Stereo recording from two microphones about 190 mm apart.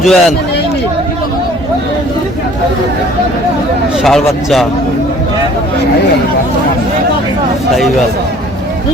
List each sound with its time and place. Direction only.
0.0 s speech: centre (ahead or behind)
4.0 s speech: centre (ahead or behind)